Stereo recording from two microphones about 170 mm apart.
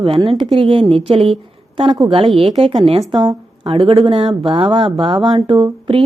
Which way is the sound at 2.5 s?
35° right (ahead or behind).